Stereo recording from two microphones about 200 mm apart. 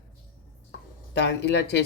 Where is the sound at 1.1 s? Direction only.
60° left (ahead or behind).